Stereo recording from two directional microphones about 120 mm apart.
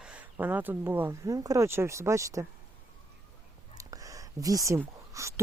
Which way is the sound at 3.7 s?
30° right (ahead or behind).